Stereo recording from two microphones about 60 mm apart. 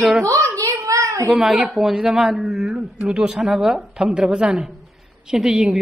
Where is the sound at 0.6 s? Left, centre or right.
Right.